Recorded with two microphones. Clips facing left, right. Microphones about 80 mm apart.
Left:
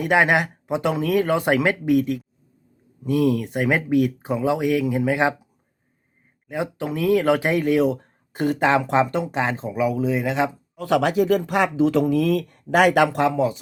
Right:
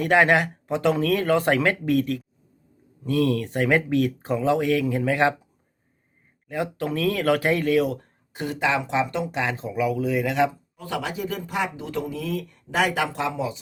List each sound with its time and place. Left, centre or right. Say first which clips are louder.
0.0 s speech: even; centre
6.5 s speech: left 1 dB; centre
8.3 s speech: left 5 dB; left
10.8 s speech: left 10 dB; left